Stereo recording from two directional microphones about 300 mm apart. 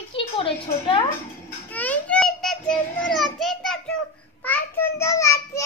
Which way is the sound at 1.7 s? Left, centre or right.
Centre.